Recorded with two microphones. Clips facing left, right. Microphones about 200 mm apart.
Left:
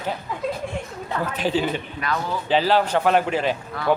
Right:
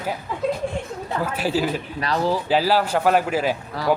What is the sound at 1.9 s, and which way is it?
Speech, 35° right (ahead or behind).